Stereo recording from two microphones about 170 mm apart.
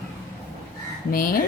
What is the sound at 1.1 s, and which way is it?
Speech, 55° left (ahead or behind).